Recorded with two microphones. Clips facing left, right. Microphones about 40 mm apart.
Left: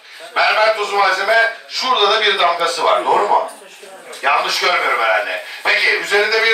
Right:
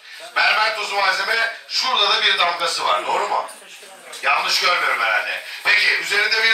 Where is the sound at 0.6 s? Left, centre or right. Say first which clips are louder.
Left 5 dB; left.